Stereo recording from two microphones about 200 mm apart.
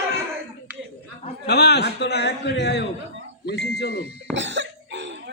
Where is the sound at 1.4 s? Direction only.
55° left (ahead or behind).